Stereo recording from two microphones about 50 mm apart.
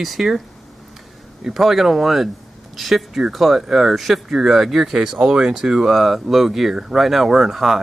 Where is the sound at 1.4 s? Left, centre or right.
Centre.